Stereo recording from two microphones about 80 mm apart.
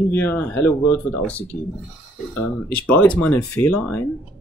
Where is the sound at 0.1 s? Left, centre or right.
Left.